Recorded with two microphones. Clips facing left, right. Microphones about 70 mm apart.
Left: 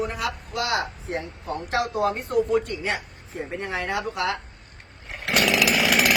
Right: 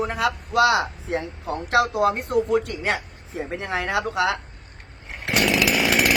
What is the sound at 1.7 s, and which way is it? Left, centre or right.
Speech, right.